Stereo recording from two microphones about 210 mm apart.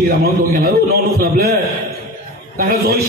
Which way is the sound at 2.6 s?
45° right (ahead or behind).